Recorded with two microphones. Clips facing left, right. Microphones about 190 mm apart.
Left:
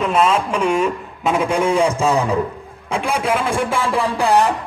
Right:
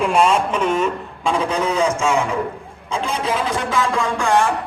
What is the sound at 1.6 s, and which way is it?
Speech, 30° left (ahead or behind).